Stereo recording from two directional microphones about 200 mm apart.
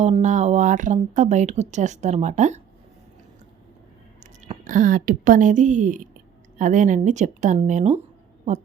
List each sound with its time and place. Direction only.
0.0 s speech: 35° right (ahead or behind)
4.2 s a woman's voice: 40° right (ahead or behind)